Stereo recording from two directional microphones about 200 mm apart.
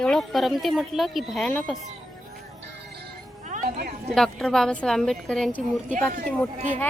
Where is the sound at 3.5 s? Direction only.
45° right (ahead or behind).